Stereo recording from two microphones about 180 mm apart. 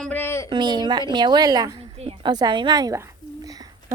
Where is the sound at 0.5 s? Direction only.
25° right (ahead or behind).